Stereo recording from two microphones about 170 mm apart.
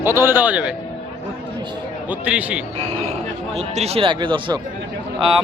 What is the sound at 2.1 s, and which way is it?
Speech, 10° right (ahead or behind).